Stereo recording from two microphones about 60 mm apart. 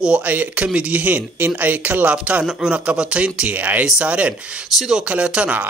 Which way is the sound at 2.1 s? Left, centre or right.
Centre.